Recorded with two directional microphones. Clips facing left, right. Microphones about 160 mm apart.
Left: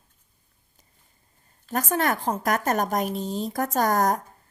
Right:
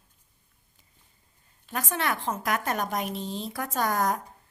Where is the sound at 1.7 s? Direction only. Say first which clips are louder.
Left 5 dB; 45° left (ahead or behind).